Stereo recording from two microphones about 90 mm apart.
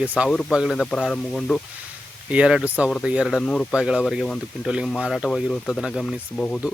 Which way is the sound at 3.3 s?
5° left (ahead or behind).